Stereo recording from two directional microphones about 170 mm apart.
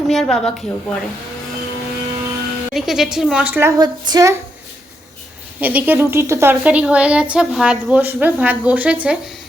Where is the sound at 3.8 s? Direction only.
20° right (ahead or behind).